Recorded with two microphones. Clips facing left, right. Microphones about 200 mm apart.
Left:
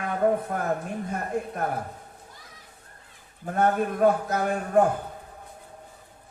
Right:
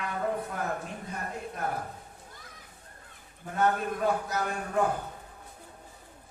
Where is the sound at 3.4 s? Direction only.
50° left (ahead or behind).